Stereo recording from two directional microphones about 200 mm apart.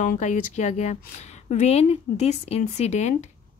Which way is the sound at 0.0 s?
40° left (ahead or behind).